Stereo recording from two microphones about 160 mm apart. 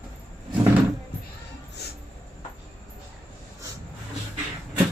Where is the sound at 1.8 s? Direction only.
90° left.